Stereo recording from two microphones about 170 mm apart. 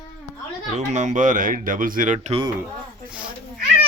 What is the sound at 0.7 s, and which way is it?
Speech, 45° right (ahead or behind).